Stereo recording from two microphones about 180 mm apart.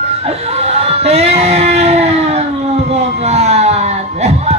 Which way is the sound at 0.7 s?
35° right (ahead or behind).